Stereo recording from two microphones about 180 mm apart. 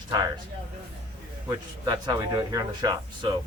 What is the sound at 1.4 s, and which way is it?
Speech, 20° right (ahead or behind).